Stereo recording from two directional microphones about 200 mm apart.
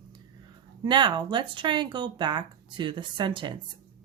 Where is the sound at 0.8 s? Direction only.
25° right (ahead or behind).